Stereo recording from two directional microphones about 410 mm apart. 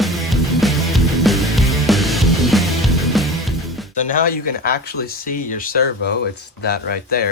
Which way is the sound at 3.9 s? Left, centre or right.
Centre.